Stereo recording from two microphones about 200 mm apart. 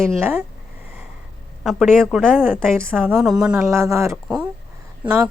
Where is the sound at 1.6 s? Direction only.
Centre (ahead or behind).